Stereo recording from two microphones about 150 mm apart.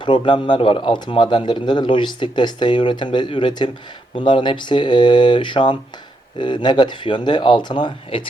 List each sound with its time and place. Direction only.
0.0 s speech: 30° left (ahead or behind)